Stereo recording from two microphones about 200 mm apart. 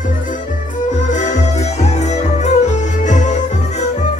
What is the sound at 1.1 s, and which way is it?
Music, 35° left (ahead or behind).